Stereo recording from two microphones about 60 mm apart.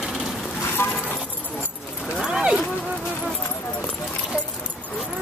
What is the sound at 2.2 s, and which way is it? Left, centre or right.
Horse, centre.